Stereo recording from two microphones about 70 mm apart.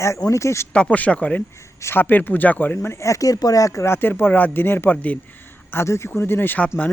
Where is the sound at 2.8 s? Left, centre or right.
Left.